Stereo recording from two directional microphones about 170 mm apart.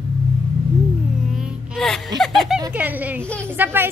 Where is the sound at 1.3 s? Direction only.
5° right (ahead or behind).